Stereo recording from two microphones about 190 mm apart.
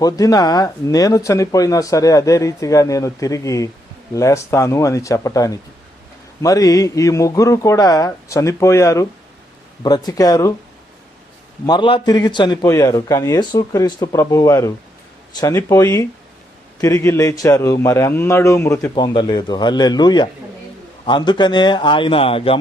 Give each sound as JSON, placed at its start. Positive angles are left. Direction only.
{"t": 0.0, "sound": "a man's voice", "side_deg": 20}
{"t": 11.6, "sound": "a man's voice", "side_deg": 25}